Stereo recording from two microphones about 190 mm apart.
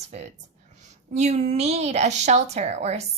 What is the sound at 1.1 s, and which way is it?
A woman's voice, 35° right (ahead or behind).